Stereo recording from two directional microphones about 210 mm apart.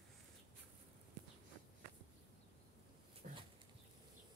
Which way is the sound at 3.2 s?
40° right (ahead or behind).